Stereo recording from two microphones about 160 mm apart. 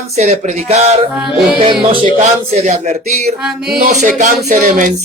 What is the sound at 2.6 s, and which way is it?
Speech, 45° right (ahead or behind).